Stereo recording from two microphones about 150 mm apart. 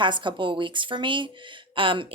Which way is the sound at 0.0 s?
30° right (ahead or behind).